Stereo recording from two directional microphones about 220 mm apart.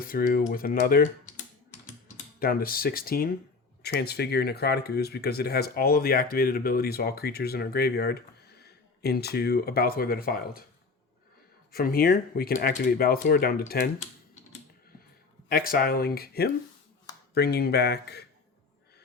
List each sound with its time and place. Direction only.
0.0 s speech: 40° left (ahead or behind)
2.4 s speech: 40° left (ahead or behind)
11.7 s speech: 45° left (ahead or behind)
15.4 s speech: 40° left (ahead or behind)